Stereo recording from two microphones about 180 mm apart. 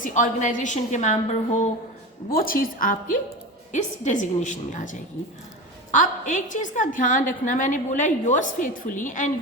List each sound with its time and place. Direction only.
0.0 s a woman's voice: 45° left (ahead or behind)
2.3 s a woman's voice: 55° left (ahead or behind)